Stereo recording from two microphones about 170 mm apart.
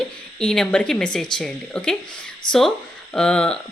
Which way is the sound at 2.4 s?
25° left (ahead or behind).